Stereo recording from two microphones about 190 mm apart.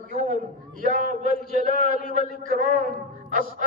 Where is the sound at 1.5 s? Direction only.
45° left (ahead or behind).